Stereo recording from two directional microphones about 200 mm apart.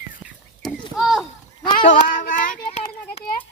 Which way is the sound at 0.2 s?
Centre (ahead or behind).